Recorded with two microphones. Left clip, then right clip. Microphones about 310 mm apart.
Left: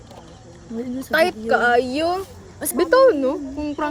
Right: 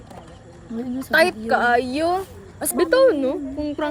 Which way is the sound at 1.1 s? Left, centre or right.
Centre.